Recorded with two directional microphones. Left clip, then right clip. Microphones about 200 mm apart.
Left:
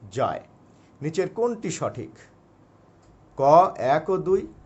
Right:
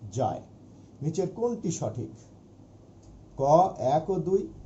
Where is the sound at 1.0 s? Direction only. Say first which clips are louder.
Left 5 dB; 50° left (ahead or behind).